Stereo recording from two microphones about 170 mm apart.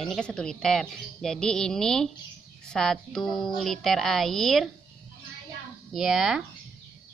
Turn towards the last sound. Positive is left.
turn(degrees=-5)  # may be behind; listen again after turning